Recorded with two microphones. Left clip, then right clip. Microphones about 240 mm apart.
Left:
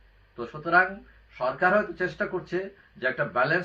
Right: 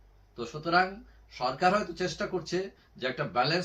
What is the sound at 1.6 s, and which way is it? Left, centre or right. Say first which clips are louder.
Speech: left 4 dB; centre.